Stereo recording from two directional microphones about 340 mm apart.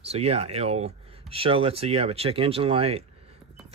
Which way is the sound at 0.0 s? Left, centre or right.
Centre.